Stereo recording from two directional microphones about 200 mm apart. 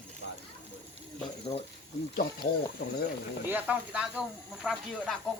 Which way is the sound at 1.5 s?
30° left (ahead or behind).